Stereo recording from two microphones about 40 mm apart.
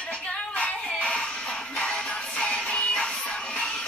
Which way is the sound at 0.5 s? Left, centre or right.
Left.